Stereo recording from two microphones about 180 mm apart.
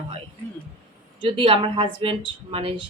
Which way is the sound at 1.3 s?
30° right (ahead or behind).